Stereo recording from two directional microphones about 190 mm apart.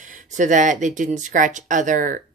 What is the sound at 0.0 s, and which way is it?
Speech, 40° right (ahead or behind).